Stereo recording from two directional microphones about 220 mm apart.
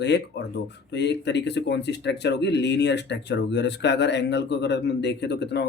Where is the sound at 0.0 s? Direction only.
50° left (ahead or behind).